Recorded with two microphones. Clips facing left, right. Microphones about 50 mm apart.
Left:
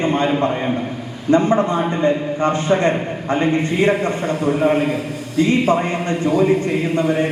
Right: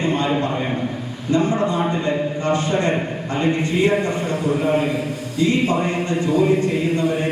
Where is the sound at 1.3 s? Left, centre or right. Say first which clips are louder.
Left 4 dB; left.